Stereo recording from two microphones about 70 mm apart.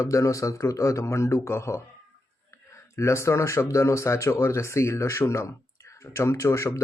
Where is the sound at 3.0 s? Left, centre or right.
Left.